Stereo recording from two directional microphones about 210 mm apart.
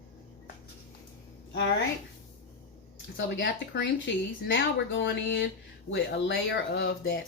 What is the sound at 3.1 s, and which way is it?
Speech, 55° left (ahead or behind).